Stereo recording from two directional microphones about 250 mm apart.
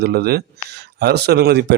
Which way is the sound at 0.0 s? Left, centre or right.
Right.